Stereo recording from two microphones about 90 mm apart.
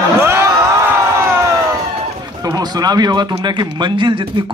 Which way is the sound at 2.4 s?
45° right (ahead or behind).